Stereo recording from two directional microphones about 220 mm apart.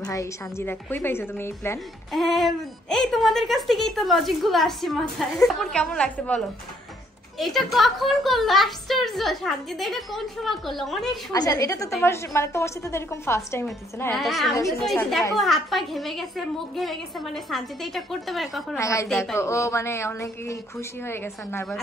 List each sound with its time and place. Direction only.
0.1 s a woman's voice: 15° left (ahead or behind)
11.3 s a woman's voice: 15° left (ahead or behind)
14.1 s a woman's voice: centre (ahead or behind)
18.8 s a woman's voice: 15° left (ahead or behind)